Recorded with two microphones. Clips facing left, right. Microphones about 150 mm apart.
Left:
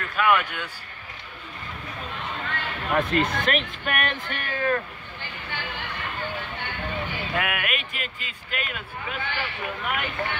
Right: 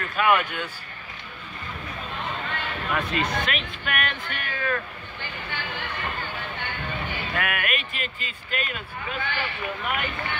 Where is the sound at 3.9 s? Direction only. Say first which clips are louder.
Left 1 dB; 35° left (ahead or behind).